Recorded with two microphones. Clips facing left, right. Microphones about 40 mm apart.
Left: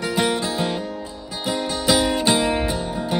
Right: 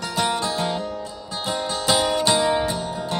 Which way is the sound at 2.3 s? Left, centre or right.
Left.